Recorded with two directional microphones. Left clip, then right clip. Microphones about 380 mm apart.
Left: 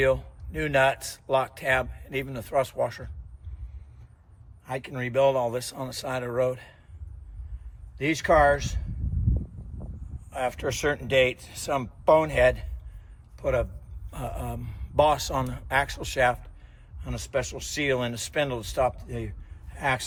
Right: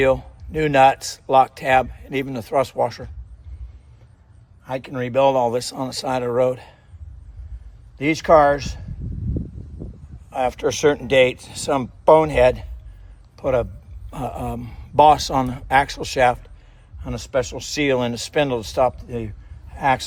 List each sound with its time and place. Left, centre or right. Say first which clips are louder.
0.0 s speech: right 6 dB; centre
4.6 s speech: right 6 dB; centre
7.9 s speech: right 7 dB; centre
10.2 s a man's voice: right 8 dB; centre